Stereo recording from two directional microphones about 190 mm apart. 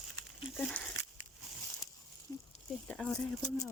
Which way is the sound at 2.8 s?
5° left (ahead or behind).